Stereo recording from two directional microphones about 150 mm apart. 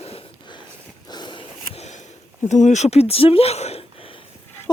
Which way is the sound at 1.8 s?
50° left (ahead or behind).